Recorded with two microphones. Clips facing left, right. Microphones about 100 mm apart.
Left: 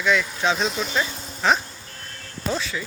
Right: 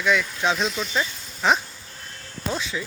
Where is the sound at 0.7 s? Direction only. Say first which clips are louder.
Left 2 dB; 45° left (ahead or behind).